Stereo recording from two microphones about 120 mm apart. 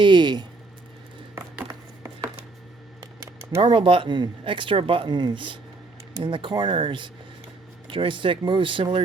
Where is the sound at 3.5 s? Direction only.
45° right (ahead or behind).